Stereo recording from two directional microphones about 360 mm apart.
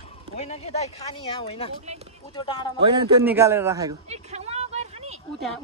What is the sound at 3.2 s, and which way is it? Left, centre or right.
Speech, centre.